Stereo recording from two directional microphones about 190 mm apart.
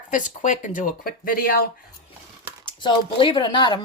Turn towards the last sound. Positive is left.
turn(degrees=25)  # may be behind; listen again after turning